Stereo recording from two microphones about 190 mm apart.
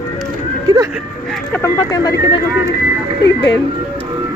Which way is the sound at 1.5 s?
15° left (ahead or behind).